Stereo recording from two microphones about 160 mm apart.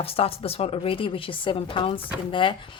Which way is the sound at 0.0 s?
40° left (ahead or behind).